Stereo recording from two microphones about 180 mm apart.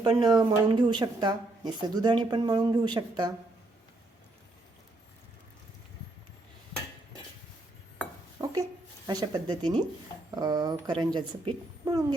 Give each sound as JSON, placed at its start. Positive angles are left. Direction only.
{"t": 0.0, "sound": "speech", "side_deg": -25}
{"t": 8.4, "sound": "a sound", "side_deg": -20}
{"t": 9.0, "sound": "speech", "side_deg": -25}